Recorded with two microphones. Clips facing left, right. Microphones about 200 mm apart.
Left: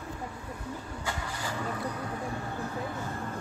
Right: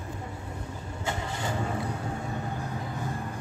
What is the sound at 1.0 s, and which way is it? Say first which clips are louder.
Vehicle: right 6 dB; 25° right (ahead or behind).